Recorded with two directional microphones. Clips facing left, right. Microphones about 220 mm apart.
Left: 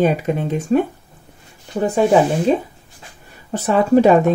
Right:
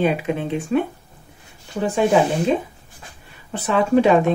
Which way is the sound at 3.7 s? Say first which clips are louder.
Left 3 dB; 40° left (ahead or behind).